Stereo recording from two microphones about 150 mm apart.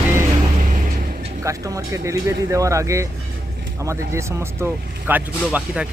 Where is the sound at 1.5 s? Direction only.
20° right (ahead or behind).